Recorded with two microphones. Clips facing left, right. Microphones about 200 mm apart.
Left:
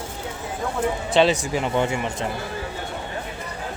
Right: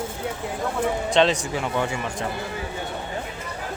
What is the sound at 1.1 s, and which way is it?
Speech, 5° left (ahead or behind).